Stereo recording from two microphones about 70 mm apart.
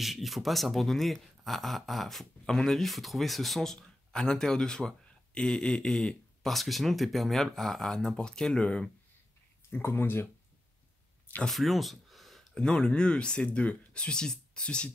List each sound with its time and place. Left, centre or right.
0.0 s speech: centre
9.7 s speech: left
11.4 s speech: centre